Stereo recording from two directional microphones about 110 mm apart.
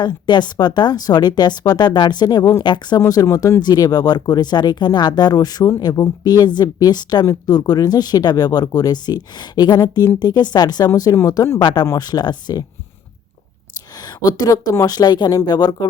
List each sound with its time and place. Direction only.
0.0 s a woman's voice: 40° left (ahead or behind)
13.9 s a woman's voice: 40° left (ahead or behind)